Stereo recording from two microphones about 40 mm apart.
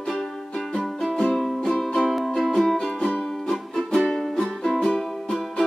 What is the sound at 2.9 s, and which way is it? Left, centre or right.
Music, left.